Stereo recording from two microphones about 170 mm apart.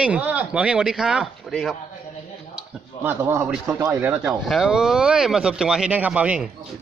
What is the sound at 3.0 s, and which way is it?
Speech, 10° right (ahead or behind).